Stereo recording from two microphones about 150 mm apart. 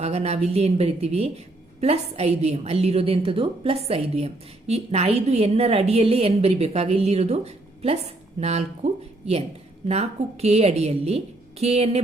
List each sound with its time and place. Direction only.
0.0 s a woman's voice: 45° right (ahead or behind)